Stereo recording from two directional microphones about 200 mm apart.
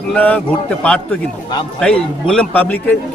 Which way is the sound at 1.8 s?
5° left (ahead or behind).